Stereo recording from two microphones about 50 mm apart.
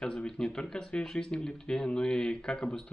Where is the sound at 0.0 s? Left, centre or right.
Centre.